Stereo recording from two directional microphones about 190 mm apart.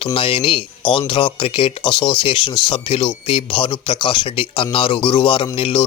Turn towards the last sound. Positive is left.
turn(degrees=30)  # may be behind; listen again after turning